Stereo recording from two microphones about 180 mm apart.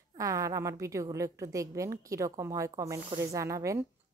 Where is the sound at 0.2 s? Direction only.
20° right (ahead or behind).